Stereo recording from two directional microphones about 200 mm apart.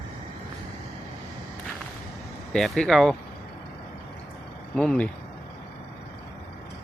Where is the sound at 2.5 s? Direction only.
Centre (ahead or behind).